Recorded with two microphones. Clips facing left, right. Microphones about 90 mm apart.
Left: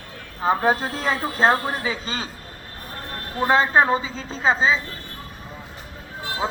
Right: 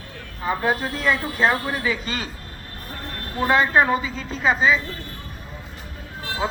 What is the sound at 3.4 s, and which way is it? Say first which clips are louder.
A man's voice: even; 30° left (ahead or behind).